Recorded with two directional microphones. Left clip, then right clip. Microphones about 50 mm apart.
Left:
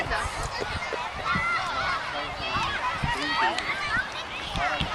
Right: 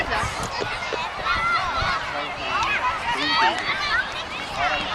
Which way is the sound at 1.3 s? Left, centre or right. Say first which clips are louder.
Right 4 dB; right.